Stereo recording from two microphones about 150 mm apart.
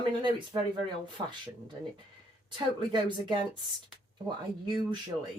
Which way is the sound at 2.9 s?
30° right (ahead or behind).